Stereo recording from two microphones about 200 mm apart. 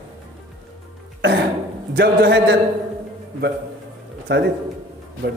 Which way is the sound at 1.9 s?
55° right (ahead or behind).